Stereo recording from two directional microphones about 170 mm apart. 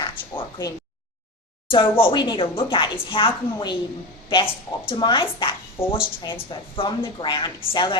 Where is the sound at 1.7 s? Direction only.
30° left (ahead or behind).